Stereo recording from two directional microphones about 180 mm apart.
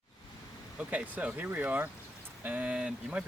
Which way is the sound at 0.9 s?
10° right (ahead or behind).